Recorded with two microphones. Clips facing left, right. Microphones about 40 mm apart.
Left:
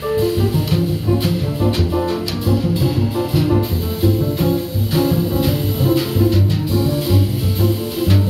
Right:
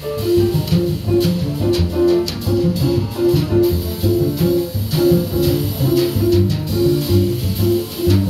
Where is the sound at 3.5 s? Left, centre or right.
Left.